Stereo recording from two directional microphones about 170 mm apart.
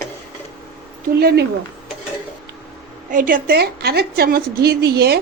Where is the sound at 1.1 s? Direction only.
70° right (ahead or behind).